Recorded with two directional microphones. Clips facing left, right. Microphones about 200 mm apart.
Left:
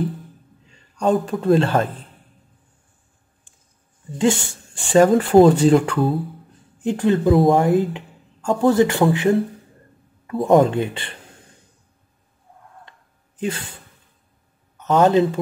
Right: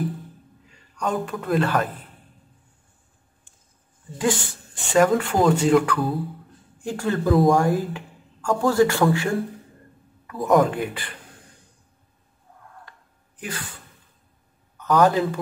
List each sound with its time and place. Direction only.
0.7 s a man's voice: 30° left (ahead or behind)
4.2 s speech: 25° left (ahead or behind)
13.4 s speech: 25° left (ahead or behind)
14.8 s a man's voice: 25° left (ahead or behind)